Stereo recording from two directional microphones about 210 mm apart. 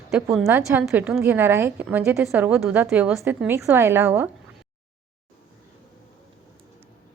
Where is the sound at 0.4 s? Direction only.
10° right (ahead or behind).